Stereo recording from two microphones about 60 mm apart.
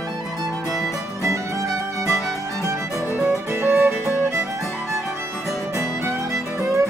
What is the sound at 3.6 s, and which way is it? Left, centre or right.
Music, right.